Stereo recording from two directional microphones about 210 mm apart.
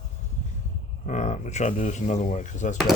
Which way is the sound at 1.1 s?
35° left (ahead or behind).